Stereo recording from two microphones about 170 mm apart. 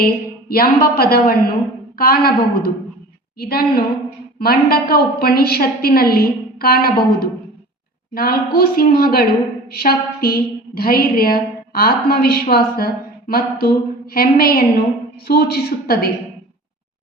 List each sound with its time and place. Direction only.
0.0 s a woman's voice: 60° left (ahead or behind)